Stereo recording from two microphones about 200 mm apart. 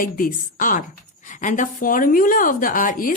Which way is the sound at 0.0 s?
45° left (ahead or behind).